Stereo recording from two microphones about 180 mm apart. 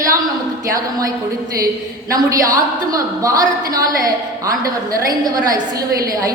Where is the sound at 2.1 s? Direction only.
20° right (ahead or behind).